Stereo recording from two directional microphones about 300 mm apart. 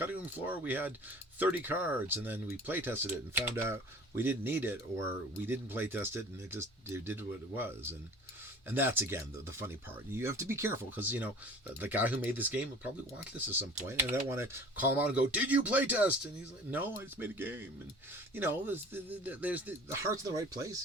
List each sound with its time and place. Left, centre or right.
0.0 s speech: centre